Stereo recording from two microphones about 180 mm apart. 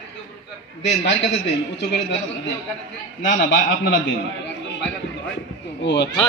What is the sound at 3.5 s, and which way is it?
Speech, 80° left.